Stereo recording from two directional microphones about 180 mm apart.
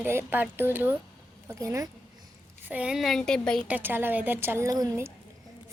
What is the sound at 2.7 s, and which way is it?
Speech, 5° right (ahead or behind).